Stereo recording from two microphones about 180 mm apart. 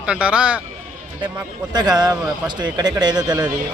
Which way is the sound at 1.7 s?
20° right (ahead or behind).